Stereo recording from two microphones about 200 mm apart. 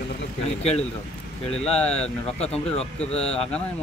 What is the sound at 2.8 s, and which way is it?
Speech, 30° left (ahead or behind).